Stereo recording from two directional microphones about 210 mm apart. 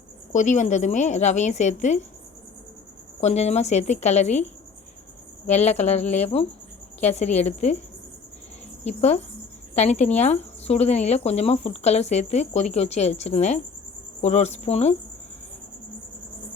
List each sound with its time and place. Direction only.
0.3 s speech: 35° left (ahead or behind)
3.2 s speech: 30° left (ahead or behind)
5.5 s speech: 30° left (ahead or behind)
8.8 s speech: 30° left (ahead or behind)